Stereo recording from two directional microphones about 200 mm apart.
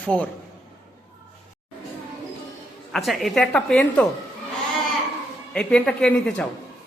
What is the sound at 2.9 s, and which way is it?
A woman's voice, centre (ahead or behind).